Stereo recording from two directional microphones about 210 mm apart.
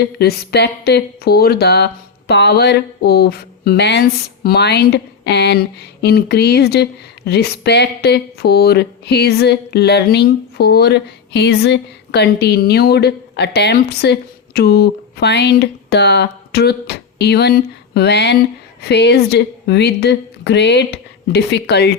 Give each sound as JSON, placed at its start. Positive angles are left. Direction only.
{"t": 0.0, "sound": "speech", "side_deg": 50}